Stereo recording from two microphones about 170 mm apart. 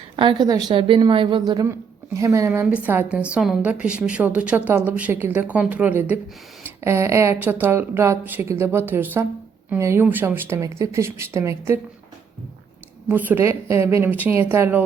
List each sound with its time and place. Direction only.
0.2 s a woman's voice: 25° right (ahead or behind)
13.1 s a woman's voice: 10° right (ahead or behind)